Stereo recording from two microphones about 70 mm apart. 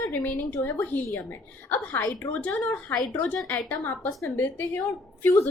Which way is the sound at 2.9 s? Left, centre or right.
Centre.